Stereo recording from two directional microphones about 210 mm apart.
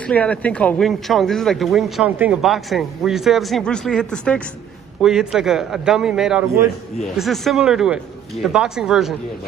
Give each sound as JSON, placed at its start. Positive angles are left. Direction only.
{"t": 0.0, "sound": "speech", "side_deg": 5}